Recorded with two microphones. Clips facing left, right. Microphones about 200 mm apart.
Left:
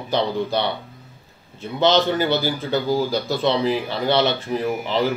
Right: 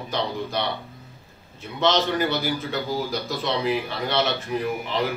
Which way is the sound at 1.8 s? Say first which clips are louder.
Left 4 dB; 30° left (ahead or behind).